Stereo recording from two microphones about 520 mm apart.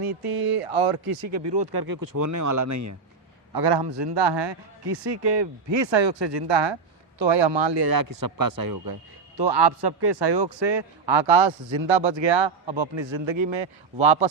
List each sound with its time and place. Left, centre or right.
0.0 s a man's voice: right
3.5 s a man's voice: right